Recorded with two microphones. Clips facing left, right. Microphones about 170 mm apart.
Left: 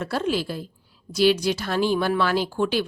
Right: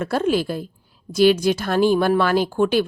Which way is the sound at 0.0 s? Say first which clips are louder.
Right 5 dB; 50° right (ahead or behind).